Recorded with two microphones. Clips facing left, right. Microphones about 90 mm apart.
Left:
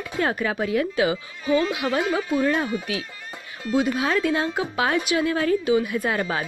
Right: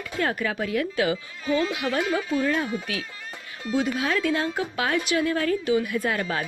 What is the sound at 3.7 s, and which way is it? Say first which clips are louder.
Speech: left 3 dB; 15° left (ahead or behind).